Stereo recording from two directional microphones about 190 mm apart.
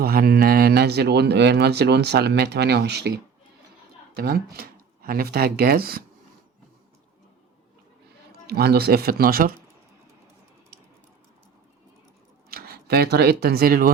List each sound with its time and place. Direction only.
0.0 s speech: 55° right (ahead or behind)
4.2 s speech: 55° right (ahead or behind)
8.4 s speech: 55° right (ahead or behind)
12.5 s speech: 50° right (ahead or behind)